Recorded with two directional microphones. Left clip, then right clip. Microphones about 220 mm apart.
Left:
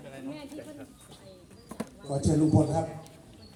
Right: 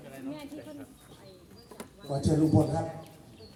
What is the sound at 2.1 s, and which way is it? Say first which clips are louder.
Speech: left 1 dB; 45° left (ahead or behind).